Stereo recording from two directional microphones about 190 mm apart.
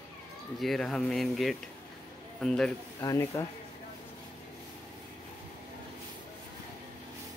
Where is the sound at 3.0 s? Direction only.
15° left (ahead or behind).